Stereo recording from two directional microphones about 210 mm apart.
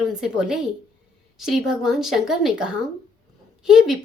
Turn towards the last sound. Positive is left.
turn(degrees=0)  # may be behind; listen again after turning